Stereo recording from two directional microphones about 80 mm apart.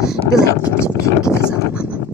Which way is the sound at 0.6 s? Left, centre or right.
Left.